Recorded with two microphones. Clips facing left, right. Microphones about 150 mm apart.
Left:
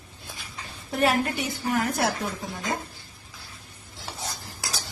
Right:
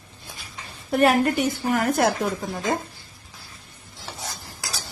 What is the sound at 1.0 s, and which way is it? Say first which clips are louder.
A woman's voice: right 5 dB; 55° right (ahead or behind).